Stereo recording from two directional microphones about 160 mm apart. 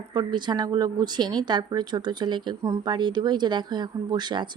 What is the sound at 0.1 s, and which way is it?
A woman's voice, 30° right (ahead or behind).